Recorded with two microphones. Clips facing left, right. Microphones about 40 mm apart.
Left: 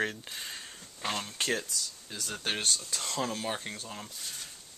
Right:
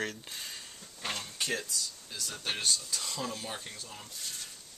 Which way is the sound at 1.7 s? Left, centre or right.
Left.